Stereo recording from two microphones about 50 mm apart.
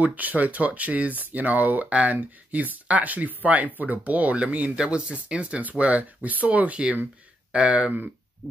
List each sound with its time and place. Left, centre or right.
0.0 s speech: right
4.7 s speech: centre